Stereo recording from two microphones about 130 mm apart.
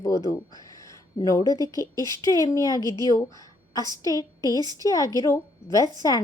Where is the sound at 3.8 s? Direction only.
30° right (ahead or behind).